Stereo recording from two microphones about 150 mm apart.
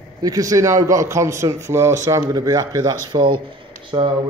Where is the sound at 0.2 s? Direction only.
25° right (ahead or behind).